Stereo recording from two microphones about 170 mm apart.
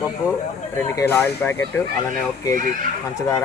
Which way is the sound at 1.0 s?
15° left (ahead or behind).